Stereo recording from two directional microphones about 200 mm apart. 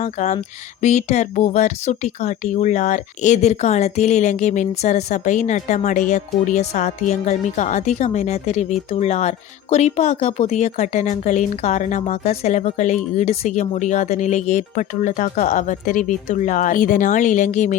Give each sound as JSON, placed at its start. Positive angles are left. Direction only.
{"t": 0.0, "sound": "speech", "side_deg": 35}